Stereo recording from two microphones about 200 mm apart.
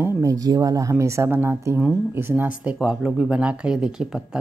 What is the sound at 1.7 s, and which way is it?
A woman's voice, centre (ahead or behind).